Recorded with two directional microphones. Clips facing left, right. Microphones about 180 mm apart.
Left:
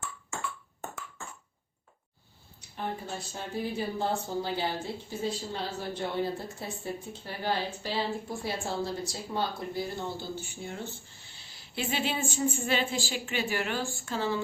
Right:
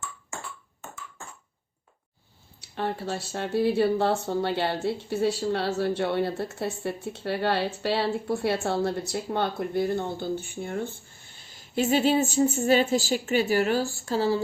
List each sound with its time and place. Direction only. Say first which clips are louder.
2.6 s speech: right 6 dB; 75° right (ahead or behind); by 14.4 s 35° right (ahead or behind)